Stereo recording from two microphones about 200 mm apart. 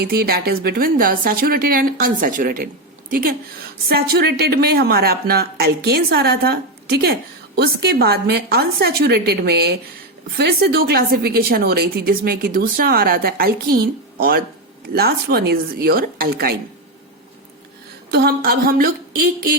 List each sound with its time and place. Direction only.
0.0 s speech: 50° right (ahead or behind)
18.1 s speech: 50° right (ahead or behind)